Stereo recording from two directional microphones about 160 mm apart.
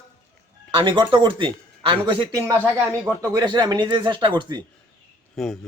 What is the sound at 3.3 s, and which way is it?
Speech, 25° right (ahead or behind).